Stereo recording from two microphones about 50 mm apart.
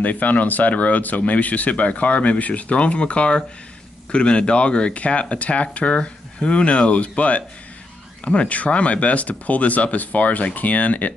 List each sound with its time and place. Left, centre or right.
0.0 s speech: left